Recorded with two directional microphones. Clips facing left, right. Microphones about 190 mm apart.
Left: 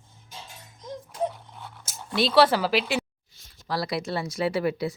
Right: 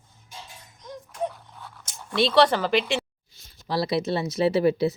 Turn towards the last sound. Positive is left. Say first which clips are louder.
# right 5 dB
turn(degrees=-25)  # may be behind; listen again after turning